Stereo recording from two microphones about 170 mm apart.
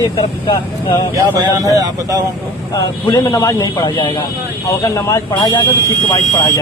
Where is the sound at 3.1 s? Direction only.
20° left (ahead or behind).